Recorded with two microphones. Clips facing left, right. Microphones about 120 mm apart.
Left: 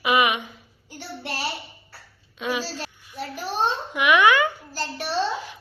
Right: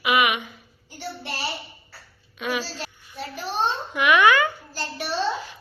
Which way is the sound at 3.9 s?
15° left (ahead or behind).